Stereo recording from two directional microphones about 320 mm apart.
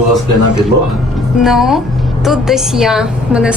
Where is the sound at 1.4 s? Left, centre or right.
Centre.